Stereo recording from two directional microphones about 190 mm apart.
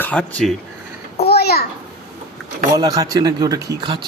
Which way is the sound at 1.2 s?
55° left (ahead or behind).